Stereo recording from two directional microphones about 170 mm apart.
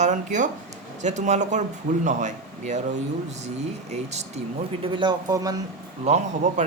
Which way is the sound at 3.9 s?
40° right (ahead or behind).